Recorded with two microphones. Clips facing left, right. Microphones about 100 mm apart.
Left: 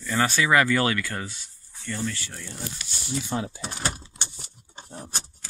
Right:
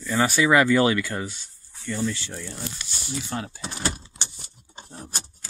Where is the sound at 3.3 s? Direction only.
15° left (ahead or behind).